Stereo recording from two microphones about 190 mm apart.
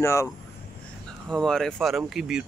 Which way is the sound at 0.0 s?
15° left (ahead or behind).